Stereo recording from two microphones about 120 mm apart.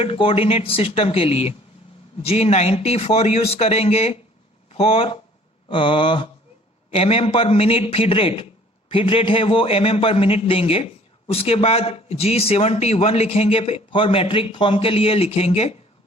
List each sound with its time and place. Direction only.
0.0 s a man's voice: 50° left (ahead or behind)
6.9 s a man's voice: 55° left (ahead or behind)